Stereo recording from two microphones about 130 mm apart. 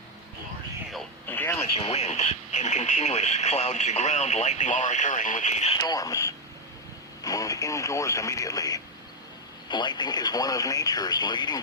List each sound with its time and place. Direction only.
1.3 s a sound: 15° left (ahead or behind)
1.5 s speech: 50° left (ahead or behind)
5.8 s speech: 30° left (ahead or behind)